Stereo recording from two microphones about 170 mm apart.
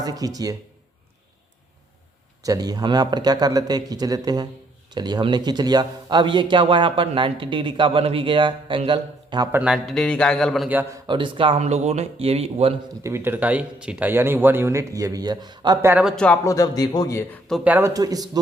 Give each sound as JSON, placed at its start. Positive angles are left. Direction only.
{"t": 0.0, "sound": "speech", "side_deg": -20}
{"t": 2.4, "sound": "speech", "side_deg": -20}
{"t": 9.5, "sound": "a man's voice", "side_deg": -5}
{"t": 10.7, "sound": "speech", "side_deg": -10}
{"t": 11.0, "sound": "speech", "side_deg": -30}
{"t": 13.0, "sound": "speech", "side_deg": -15}
{"t": 16.0, "sound": "a man's voice", "side_deg": 5}
{"t": 16.5, "sound": "a man's voice", "side_deg": 20}
{"t": 17.6, "sound": "speech", "side_deg": -10}